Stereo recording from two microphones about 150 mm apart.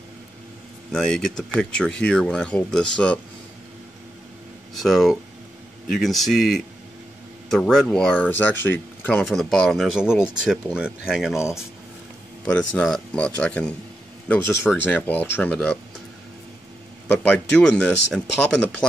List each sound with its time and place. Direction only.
0.9 s speech: 5° left (ahead or behind)
4.7 s speech: centre (ahead or behind)
9.2 s speech: centre (ahead or behind)
12.5 s speech: 5° left (ahead or behind)
17.2 s speech: 5° left (ahead or behind)